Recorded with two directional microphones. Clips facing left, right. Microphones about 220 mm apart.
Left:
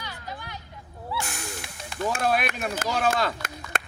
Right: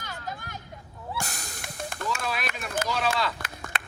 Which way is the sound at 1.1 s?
40° right (ahead or behind).